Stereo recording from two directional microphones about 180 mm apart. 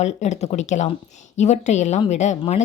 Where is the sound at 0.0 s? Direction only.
40° left (ahead or behind).